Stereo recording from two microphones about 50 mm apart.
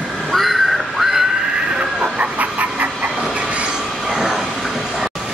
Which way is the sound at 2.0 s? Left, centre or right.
Right.